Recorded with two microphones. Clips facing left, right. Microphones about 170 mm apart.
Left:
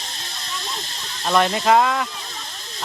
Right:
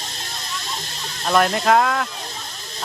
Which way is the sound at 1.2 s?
Centre (ahead or behind).